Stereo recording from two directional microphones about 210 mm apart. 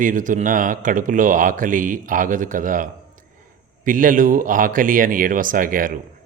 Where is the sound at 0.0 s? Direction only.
40° right (ahead or behind).